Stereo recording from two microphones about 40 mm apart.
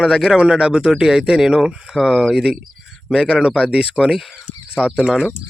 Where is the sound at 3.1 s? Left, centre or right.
Right.